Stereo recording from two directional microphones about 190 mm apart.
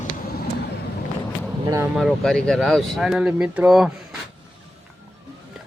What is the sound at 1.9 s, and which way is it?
Speech, centre (ahead or behind).